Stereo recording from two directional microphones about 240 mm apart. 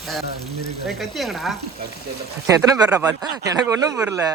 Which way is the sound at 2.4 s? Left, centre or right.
Centre.